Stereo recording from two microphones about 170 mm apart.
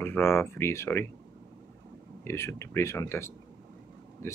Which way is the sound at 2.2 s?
15° left (ahead or behind).